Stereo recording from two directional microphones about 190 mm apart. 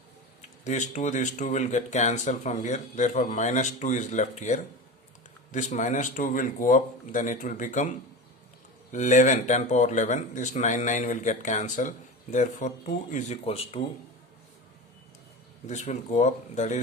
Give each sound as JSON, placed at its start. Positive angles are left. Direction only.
{"t": 0.6, "sound": "speech", "side_deg": 40}
{"t": 15.6, "sound": "speech", "side_deg": 40}